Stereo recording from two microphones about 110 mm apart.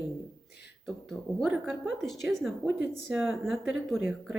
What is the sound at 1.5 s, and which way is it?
Speech, 10° right (ahead or behind).